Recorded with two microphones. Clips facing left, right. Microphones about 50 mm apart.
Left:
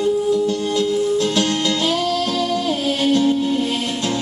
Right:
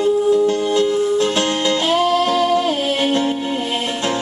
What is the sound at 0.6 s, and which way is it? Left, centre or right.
Music, right.